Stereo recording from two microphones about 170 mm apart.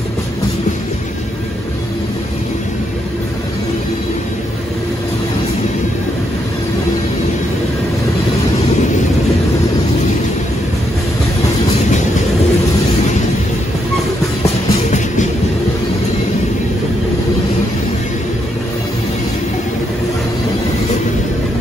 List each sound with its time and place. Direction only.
14.4 s music: 45° left (ahead or behind)